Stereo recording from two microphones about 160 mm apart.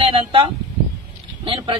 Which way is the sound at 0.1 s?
35° right (ahead or behind).